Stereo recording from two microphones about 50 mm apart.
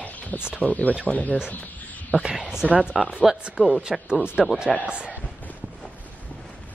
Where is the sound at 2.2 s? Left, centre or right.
Centre.